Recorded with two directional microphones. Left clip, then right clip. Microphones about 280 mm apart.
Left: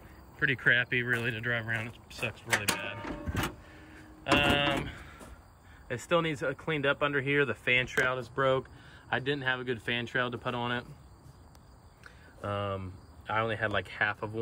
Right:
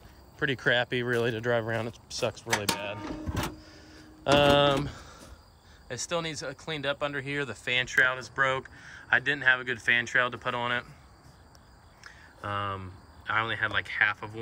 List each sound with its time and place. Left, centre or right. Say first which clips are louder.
0.4 s speech: even; centre
3.9 s printer: right 4 dB; centre
5.9 s speech: left 3 dB; centre
9.1 s speech: right 7 dB; centre
12.4 s speech: right 2 dB; centre